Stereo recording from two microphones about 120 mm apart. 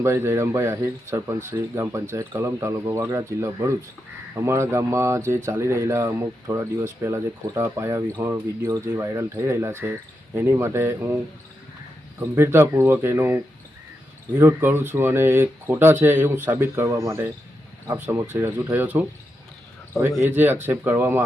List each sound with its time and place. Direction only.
0.0 s speech: 20° right (ahead or behind)
12.3 s speech: 20° right (ahead or behind)
20.2 s speech: 15° right (ahead or behind)